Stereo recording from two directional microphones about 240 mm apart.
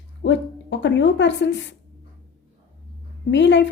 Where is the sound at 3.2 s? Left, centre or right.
Left.